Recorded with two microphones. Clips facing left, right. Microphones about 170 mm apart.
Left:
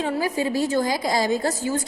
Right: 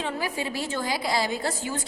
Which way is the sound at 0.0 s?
40° left (ahead or behind).